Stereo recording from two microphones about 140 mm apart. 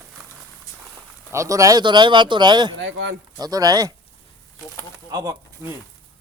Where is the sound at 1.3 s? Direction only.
20° right (ahead or behind).